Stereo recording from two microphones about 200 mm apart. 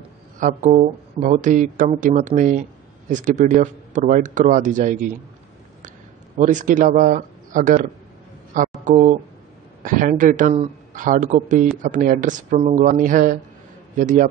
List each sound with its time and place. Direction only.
0.4 s speech: 40° right (ahead or behind)
6.3 s speech: 40° right (ahead or behind)